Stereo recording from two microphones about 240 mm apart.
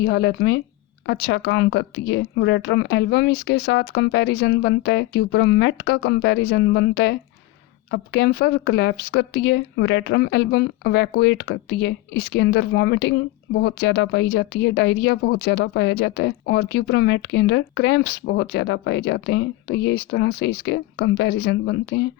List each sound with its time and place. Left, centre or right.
0.0 s speech: left